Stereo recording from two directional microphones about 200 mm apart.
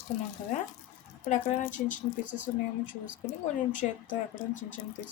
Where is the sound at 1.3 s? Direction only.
40° left (ahead or behind).